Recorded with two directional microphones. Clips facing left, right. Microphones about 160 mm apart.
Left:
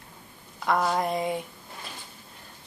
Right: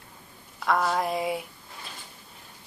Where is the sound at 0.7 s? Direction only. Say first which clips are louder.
Even; centre (ahead or behind).